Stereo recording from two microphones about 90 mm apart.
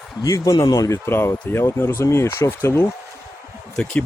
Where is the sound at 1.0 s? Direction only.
25° left (ahead or behind).